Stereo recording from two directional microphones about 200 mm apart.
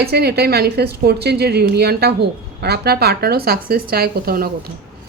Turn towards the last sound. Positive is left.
turn(degrees=-50)  # may be behind; listen again after turning